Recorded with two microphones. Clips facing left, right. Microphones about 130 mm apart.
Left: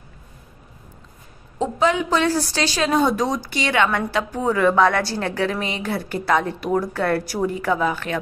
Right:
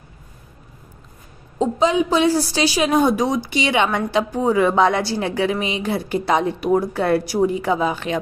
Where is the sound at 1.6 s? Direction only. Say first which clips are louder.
Right 2 dB; 15° right (ahead or behind).